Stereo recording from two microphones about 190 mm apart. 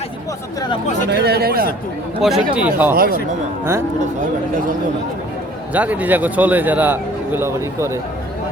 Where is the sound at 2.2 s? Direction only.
Centre (ahead or behind).